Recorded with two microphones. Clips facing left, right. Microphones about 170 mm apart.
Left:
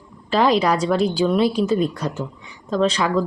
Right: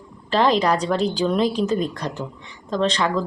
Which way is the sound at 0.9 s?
35° right (ahead or behind).